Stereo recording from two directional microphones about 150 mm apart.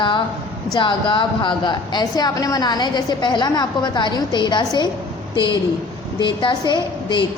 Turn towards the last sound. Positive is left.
turn(degrees=30)  # may be behind; listen again after turning